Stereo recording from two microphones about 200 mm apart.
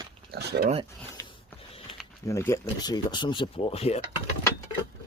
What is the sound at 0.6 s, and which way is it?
Speech, 30° right (ahead or behind).